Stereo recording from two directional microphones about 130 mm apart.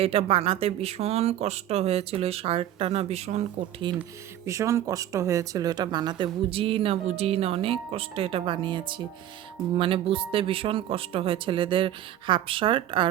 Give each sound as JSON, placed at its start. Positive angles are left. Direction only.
{"t": 0.0, "sound": "speech", "side_deg": -50}
{"t": 4.4, "sound": "speech", "side_deg": -25}